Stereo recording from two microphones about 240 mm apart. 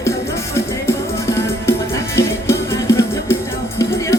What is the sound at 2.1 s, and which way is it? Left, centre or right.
Music, centre.